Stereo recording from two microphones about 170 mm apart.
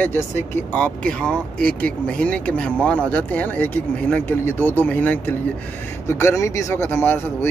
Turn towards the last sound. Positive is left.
turn(degrees=10)  # may be behind; listen again after turning